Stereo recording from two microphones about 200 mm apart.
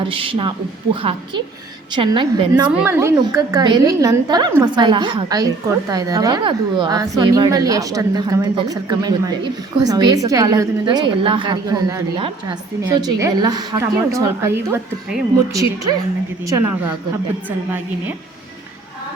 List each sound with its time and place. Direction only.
0.0 s a woman's voice: 25° right (ahead or behind)
2.0 s a woman's voice: 20° right (ahead or behind)
2.7 s a woman's voice: 10° right (ahead or behind)